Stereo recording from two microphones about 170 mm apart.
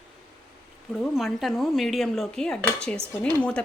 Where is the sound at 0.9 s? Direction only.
Centre (ahead or behind).